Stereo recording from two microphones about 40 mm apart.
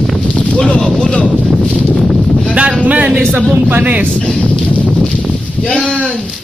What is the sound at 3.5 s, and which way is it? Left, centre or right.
Speech, right.